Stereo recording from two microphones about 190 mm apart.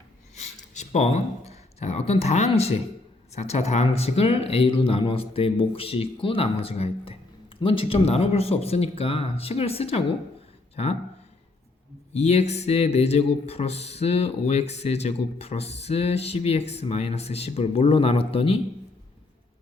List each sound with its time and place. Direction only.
0.3 s a man's voice: 40° left (ahead or behind)
12.1 s a man's voice: 35° left (ahead or behind)